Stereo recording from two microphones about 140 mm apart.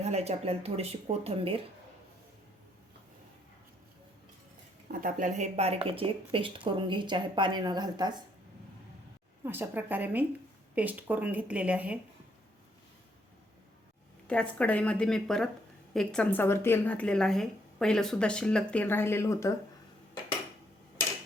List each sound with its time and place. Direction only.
0.0 s speech: 50° right (ahead or behind)
4.9 s speech: 75° right (ahead or behind)
5.5 s speech: 45° right (ahead or behind); by 8.2 s 30° right (ahead or behind)
9.4 s speech: 15° right (ahead or behind)
14.3 s a woman's voice: 10° left (ahead or behind)